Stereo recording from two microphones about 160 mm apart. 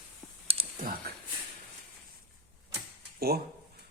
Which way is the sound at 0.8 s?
65° right (ahead or behind).